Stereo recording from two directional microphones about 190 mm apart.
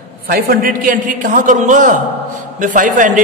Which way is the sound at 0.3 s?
50° right (ahead or behind).